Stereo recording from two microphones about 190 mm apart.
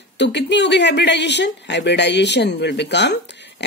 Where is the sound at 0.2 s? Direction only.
65° left (ahead or behind).